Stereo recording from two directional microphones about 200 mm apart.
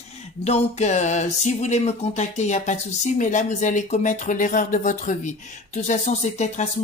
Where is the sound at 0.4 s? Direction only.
35° left (ahead or behind).